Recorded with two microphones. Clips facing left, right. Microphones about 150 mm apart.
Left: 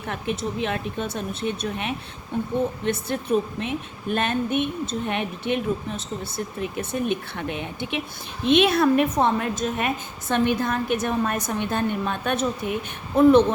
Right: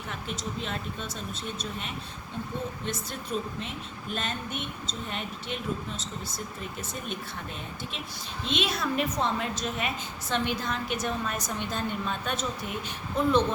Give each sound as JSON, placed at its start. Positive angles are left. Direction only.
{"t": 0.1, "sound": "a woman's voice", "side_deg": 60}